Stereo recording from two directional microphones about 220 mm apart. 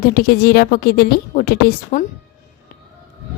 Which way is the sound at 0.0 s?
45° left (ahead or behind).